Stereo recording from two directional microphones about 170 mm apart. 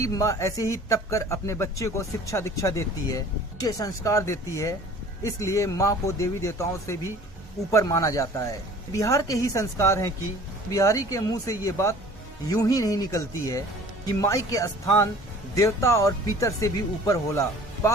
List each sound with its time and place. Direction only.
0.0 s a man's voice: 20° left (ahead or behind)